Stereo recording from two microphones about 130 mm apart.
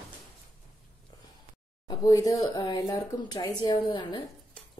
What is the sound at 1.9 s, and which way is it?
A woman's voice, 25° left (ahead or behind).